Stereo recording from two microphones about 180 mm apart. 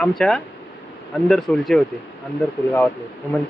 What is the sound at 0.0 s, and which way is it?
A man's voice, 5° left (ahead or behind).